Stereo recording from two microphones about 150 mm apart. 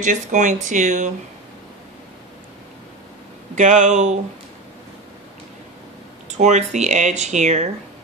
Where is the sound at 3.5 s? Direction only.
55° right (ahead or behind).